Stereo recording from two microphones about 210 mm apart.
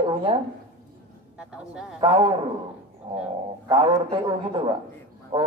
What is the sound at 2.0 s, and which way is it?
Mantra, 20° right (ahead or behind).